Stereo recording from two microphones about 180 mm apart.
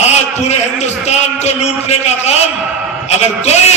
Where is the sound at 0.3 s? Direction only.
40° left (ahead or behind).